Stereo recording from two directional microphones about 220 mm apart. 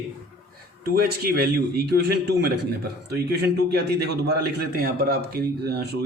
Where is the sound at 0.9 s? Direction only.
45° right (ahead or behind).